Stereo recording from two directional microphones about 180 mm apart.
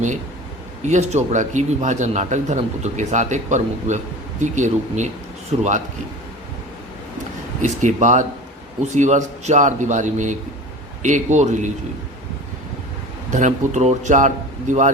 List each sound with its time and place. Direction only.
0.8 s speech: 40° right (ahead or behind)
7.6 s speech: 45° right (ahead or behind)
13.3 s speech: 40° right (ahead or behind)